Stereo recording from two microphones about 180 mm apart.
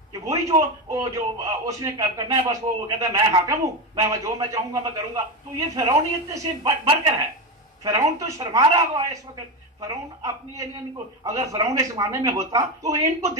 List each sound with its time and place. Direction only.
0.1 s speech: 20° right (ahead or behind)